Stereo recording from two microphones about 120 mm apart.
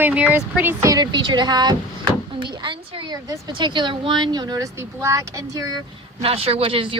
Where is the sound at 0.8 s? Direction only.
30° right (ahead or behind).